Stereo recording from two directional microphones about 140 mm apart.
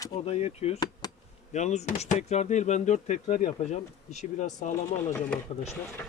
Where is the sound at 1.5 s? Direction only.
55° left (ahead or behind).